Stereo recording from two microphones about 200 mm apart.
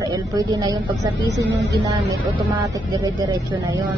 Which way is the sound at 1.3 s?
60° right (ahead or behind).